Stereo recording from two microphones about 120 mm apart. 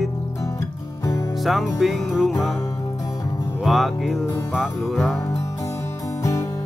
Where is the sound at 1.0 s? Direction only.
25° left (ahead or behind).